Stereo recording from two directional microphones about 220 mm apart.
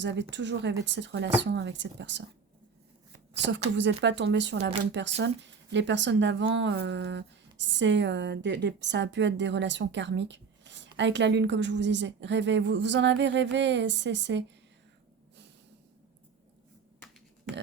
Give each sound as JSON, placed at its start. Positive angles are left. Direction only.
{"t": 0.0, "sound": "speech", "side_deg": -55}
{"t": 3.8, "sound": "speech", "side_deg": -55}